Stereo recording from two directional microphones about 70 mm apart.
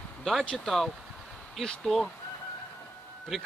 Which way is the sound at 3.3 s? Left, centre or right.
Centre.